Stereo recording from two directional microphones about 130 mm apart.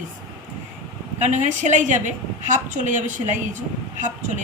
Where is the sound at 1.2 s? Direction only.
65° right (ahead or behind).